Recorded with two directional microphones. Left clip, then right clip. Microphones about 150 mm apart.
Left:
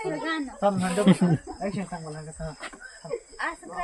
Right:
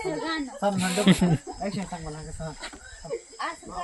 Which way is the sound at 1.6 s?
Centre (ahead or behind).